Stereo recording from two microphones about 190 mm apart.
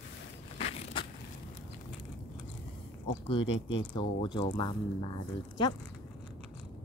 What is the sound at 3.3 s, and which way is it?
Speech, 25° left (ahead or behind).